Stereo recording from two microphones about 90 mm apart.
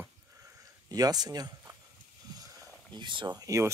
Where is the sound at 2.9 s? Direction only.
60° right (ahead or behind).